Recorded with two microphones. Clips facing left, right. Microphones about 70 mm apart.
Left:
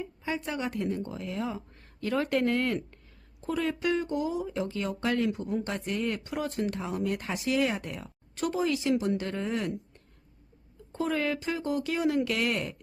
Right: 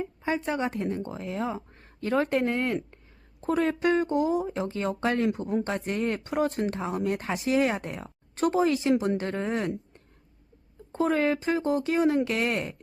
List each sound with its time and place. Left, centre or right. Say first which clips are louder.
0.0 s a sound: right 5 dB; right
0.4 s speech: right 3 dB; right
3.4 s speech: right 5 dB; right